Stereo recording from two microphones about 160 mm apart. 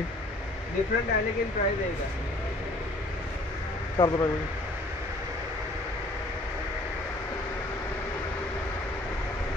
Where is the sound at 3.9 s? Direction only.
30° left (ahead or behind).